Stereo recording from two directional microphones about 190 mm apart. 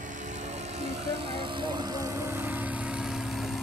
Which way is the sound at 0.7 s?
35° right (ahead or behind).